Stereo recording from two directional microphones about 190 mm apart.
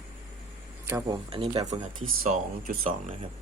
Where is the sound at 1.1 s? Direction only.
30° right (ahead or behind).